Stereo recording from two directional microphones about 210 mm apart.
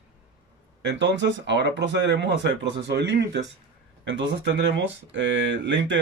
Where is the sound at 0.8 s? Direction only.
55° right (ahead or behind).